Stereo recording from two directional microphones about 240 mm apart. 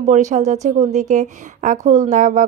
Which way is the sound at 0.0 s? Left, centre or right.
Right.